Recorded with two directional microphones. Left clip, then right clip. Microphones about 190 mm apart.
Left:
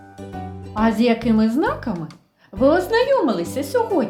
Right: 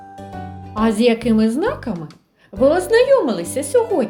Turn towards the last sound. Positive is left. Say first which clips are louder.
# right 3 dB
turn(degrees=-25)  # may be behind; listen again after turning